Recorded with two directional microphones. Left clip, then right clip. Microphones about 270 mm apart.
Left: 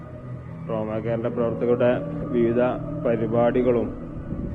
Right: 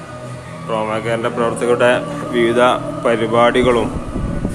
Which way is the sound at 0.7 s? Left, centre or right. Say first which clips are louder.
Right 8 dB; centre.